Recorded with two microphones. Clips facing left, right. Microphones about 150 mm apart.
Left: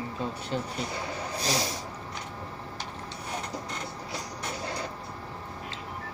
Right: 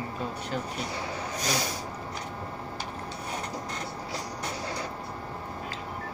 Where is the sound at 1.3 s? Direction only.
35° left (ahead or behind).